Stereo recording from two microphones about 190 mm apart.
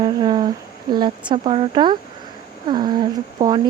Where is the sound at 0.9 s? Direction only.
25° right (ahead or behind).